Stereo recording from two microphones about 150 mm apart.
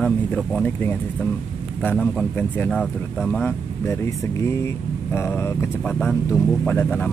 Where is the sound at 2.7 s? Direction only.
Centre (ahead or behind).